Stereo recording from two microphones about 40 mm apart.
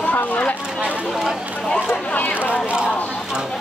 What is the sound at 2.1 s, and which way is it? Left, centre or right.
Speech, left.